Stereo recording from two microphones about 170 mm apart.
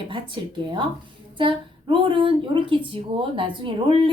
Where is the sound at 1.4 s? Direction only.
30° right (ahead or behind).